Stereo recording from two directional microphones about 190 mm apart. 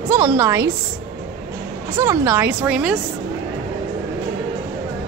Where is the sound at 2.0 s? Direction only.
15° right (ahead or behind).